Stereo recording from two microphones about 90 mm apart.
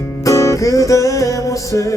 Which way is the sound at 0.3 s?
35° left (ahead or behind).